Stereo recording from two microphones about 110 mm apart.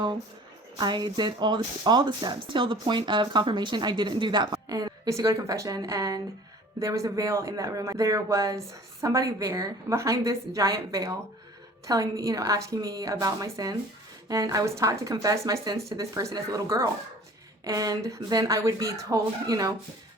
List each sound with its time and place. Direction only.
0.8 s speech: 40° right (ahead or behind)